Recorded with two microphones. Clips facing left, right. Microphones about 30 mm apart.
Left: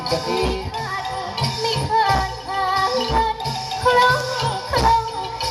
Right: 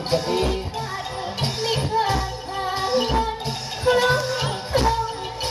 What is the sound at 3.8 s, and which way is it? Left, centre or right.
Music, left.